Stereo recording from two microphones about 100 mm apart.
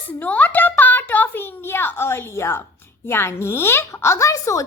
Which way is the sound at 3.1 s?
25° left (ahead or behind).